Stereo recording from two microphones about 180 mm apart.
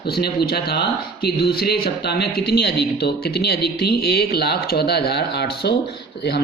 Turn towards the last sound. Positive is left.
turn(degrees=60)  # may be behind; listen again after turning